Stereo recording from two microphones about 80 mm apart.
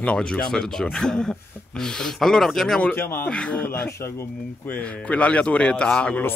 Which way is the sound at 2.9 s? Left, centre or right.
Left.